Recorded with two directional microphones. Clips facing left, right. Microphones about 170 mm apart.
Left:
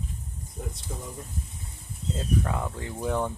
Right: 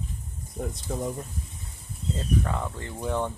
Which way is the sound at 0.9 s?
60° right (ahead or behind).